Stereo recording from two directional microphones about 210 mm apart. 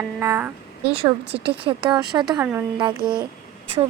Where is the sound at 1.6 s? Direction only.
20° right (ahead or behind).